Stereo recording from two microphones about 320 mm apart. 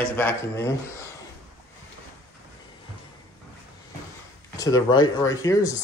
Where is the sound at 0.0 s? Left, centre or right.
Centre.